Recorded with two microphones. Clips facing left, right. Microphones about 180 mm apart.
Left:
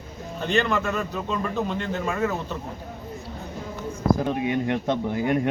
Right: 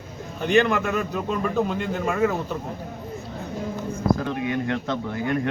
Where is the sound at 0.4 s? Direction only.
10° right (ahead or behind).